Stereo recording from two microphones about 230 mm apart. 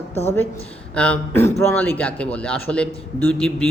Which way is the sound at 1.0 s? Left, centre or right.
Centre.